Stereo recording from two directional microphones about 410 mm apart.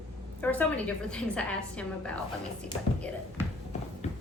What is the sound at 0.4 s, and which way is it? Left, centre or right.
A woman's voice, centre.